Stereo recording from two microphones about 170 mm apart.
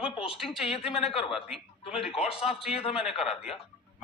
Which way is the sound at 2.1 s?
35° left (ahead or behind).